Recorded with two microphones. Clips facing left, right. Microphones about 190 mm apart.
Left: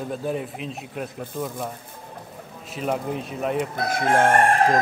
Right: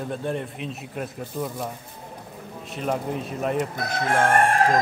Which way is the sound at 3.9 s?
15° left (ahead or behind).